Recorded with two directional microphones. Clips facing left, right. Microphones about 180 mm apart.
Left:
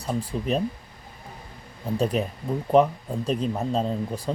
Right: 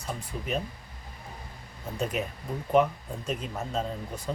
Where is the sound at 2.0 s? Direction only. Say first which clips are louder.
Left 6 dB; 35° left (ahead or behind).